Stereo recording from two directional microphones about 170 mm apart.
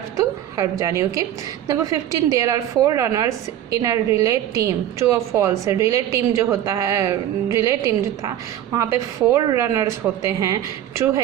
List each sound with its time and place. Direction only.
0.5 s a woman's voice: 20° right (ahead or behind)
9.3 s speech: 20° right (ahead or behind)